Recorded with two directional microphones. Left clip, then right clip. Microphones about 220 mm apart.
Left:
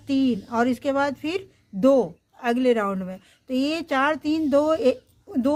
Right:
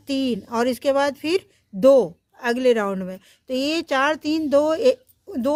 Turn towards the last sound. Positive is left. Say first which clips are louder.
# right 1 dB
turn(degrees=-40)  # may be behind; listen again after turning